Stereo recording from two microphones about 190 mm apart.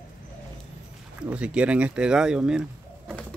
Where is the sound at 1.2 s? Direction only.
5° right (ahead or behind).